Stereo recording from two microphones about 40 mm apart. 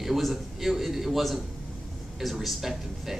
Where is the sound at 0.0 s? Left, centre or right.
Centre.